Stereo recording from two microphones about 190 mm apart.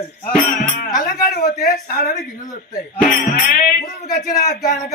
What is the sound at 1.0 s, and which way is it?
Speech, 50° left (ahead or behind).